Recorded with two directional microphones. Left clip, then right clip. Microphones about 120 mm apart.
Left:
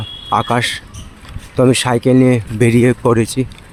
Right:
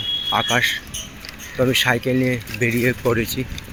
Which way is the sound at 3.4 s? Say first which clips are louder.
Left 8 dB; 60° left (ahead or behind).